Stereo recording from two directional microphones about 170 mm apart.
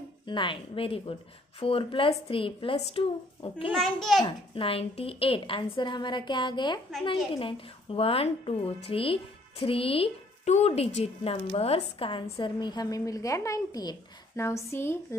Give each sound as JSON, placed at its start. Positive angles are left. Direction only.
{"t": 0.3, "sound": "a woman's voice", "side_deg": 30}
{"t": 3.7, "sound": "a child's voice", "side_deg": 0}
{"t": 4.2, "sound": "a woman's voice", "side_deg": 30}